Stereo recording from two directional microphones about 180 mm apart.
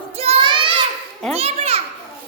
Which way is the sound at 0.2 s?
30° right (ahead or behind).